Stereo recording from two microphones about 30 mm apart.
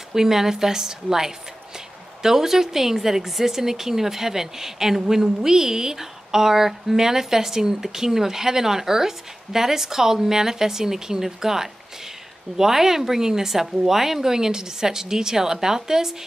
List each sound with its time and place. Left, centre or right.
0.1 s speech: centre